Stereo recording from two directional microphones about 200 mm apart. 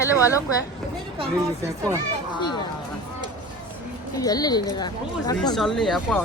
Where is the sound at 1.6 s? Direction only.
15° right (ahead or behind).